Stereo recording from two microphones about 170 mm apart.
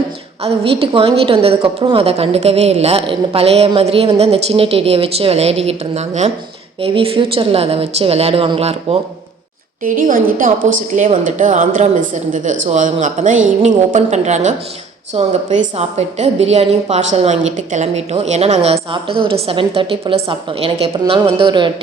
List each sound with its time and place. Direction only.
0.4 s a woman's voice: 35° right (ahead or behind)
9.8 s a woman's voice: 55° right (ahead or behind); by 21.7 s 30° right (ahead or behind)